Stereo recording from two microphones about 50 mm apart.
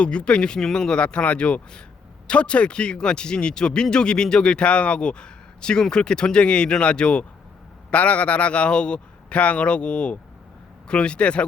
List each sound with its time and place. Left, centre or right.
0.0 s a man's voice: left